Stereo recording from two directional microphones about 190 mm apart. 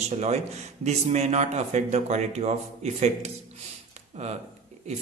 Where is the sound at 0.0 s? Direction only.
35° right (ahead or behind).